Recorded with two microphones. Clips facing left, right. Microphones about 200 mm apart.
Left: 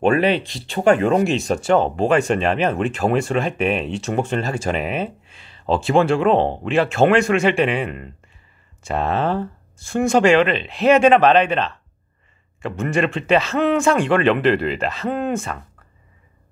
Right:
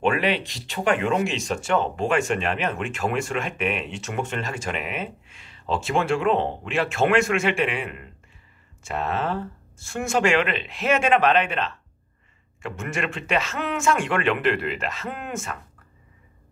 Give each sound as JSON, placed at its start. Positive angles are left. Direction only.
{"t": 0.0, "sound": "speech", "side_deg": 35}